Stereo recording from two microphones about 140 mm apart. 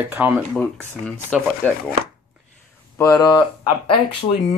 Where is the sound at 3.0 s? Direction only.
25° left (ahead or behind).